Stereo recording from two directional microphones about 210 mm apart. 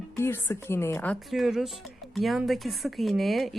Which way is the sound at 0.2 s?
10° left (ahead or behind).